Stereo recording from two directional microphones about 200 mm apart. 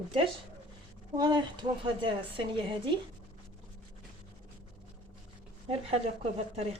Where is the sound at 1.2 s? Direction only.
20° right (ahead or behind).